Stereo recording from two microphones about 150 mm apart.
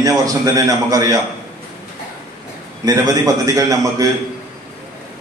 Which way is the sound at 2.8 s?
20° right (ahead or behind).